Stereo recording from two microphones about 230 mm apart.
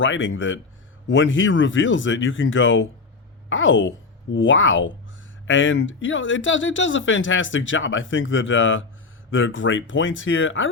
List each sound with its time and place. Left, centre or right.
0.0 s speech: left